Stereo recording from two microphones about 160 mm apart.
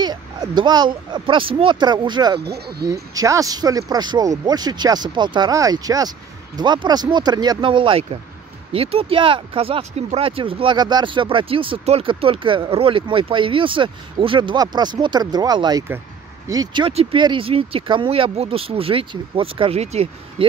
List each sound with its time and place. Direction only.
0.0 s speech: 25° right (ahead or behind)
2.4 s speech: 90° right
2.9 s speech: 20° right (ahead or behind); by 20.4 s 40° right (ahead or behind)